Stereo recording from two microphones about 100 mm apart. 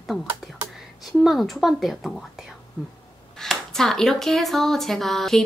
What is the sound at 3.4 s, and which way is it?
Speech, 5° left (ahead or behind).